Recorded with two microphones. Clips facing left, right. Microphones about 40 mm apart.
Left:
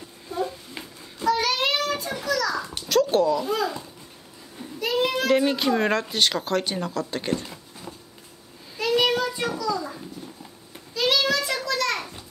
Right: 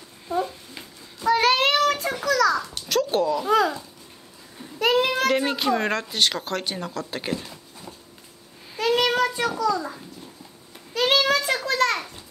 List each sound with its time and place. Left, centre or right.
1.3 s child singing: right
2.2 s a sound: right
2.5 s a sound: centre
2.9 s a sound: centre
3.4 s a child's voice: right
4.7 s child singing: right
5.3 s speech: centre
8.7 s child singing: right
10.9 s child singing: right